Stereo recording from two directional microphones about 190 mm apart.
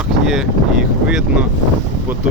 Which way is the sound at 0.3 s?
Centre (ahead or behind).